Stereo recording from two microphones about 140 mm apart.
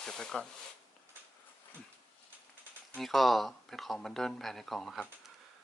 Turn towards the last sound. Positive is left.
turn(degrees=5)  # may be behind; listen again after turning